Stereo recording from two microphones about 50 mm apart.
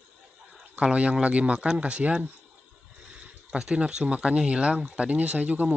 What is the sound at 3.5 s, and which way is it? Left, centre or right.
Speech, right.